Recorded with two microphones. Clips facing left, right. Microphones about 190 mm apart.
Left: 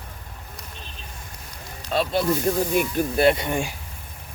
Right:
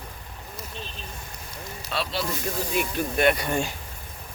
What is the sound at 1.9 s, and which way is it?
Speech, 45° left (ahead or behind).